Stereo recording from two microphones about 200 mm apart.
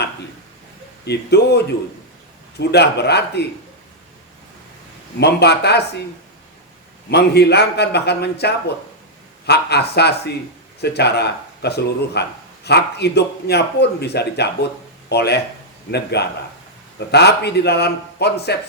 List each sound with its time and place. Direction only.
1.0 s a man's voice: 55° left (ahead or behind)
5.2 s a man's voice: 55° left (ahead or behind)
7.1 s a man's voice: 55° left (ahead or behind)